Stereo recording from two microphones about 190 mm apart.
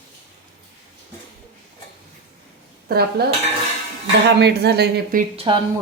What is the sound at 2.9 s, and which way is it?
Speech, 55° right (ahead or behind).